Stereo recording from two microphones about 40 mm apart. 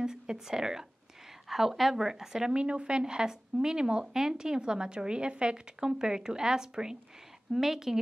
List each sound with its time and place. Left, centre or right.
0.0 s a woman's voice: centre